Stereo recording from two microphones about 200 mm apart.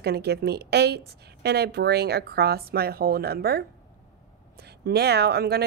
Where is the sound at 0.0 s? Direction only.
55° right (ahead or behind).